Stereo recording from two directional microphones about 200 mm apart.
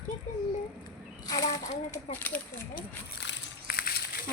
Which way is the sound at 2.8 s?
55° left (ahead or behind).